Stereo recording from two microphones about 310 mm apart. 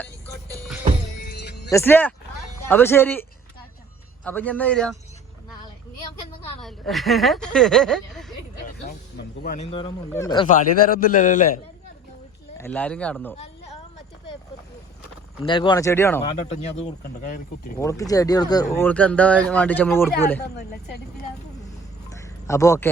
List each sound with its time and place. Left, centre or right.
1.3 s music: left
1.7 s speech: centre
6.6 s speech: centre
8.6 s speech: left
10.8 s a man's voice: left
12.5 s speech: centre
15.4 s speech: centre
16.3 s a man's voice: left
17.7 s speech: centre
22.2 s a sound: centre